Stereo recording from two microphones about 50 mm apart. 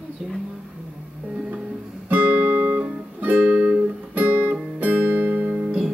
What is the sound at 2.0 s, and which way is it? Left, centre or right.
Music, right.